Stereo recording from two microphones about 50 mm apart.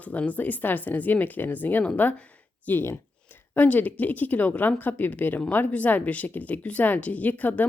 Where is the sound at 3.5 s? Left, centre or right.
Left.